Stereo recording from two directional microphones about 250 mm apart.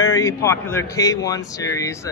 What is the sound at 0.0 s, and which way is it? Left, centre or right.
A man's voice, centre.